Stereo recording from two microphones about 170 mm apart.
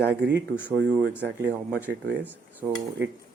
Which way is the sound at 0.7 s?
85° right.